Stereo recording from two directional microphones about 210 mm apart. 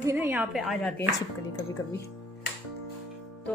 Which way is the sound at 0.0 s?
10° right (ahead or behind).